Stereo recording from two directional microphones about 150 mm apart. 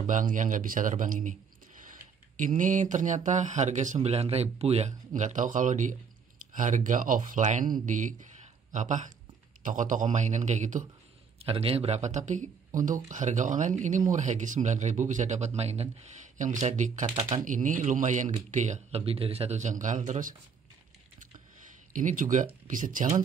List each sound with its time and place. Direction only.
0.0 s speech: 60° right (ahead or behind)
2.3 s speech: 60° right (ahead or behind)
11.3 s speech: 40° right (ahead or behind)
17.0 s speech: 40° right (ahead or behind)
17.5 s speech: 60° right (ahead or behind)
21.9 s speech: 60° right (ahead or behind)